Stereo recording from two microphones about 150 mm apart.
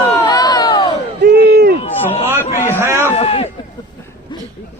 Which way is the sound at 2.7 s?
15° right (ahead or behind).